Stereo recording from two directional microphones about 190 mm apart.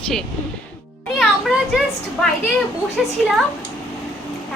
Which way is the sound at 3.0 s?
Centre (ahead or behind).